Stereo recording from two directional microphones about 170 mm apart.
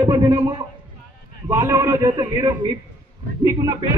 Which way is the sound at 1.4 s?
20° right (ahead or behind).